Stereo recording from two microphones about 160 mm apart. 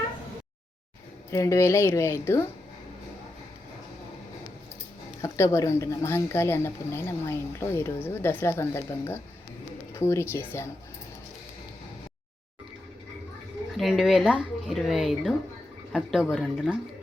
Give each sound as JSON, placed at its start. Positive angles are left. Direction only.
{"t": 1.3, "sound": "a woman's voice", "side_deg": 15}
{"t": 5.2, "sound": "a woman's voice", "side_deg": 20}
{"t": 13.7, "sound": "speech", "side_deg": 0}